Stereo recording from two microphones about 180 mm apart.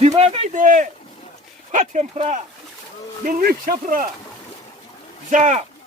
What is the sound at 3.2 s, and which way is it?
Speech, 55° right (ahead or behind).